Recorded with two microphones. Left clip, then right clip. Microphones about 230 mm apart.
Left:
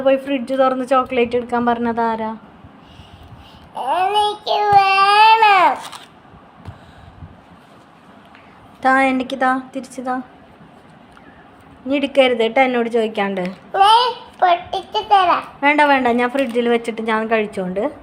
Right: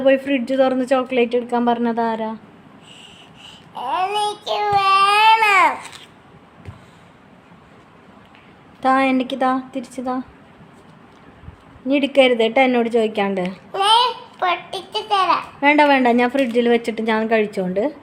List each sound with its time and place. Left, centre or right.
0.0 s a woman's voice: centre
3.8 s child singing: centre
8.8 s a woman's voice: centre
11.9 s a woman's voice: centre